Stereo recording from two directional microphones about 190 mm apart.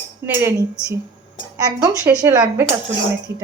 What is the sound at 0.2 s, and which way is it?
Speech, 15° right (ahead or behind).